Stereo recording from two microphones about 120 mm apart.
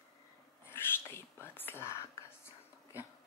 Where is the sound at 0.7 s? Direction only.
20° left (ahead or behind).